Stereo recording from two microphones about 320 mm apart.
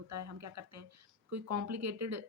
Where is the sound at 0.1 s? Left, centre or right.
Right.